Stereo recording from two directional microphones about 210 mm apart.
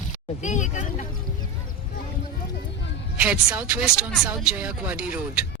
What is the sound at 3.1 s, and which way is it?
Speech, 5° right (ahead or behind).